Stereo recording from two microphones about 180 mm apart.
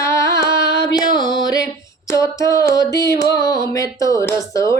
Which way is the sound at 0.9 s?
25° left (ahead or behind).